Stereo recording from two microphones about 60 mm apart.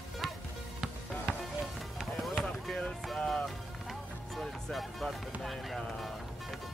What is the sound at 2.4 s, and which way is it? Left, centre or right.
Speech, centre.